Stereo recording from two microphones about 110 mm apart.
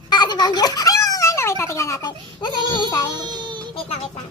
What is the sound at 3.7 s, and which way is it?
Music, 65° left (ahead or behind).